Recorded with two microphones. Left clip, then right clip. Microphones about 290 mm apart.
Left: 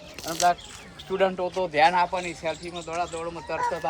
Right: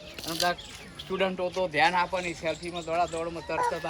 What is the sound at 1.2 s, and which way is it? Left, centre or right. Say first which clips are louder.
Speech: left 3 dB; left.